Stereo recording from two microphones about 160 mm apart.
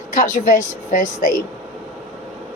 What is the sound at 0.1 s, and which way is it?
Speech, 55° left (ahead or behind).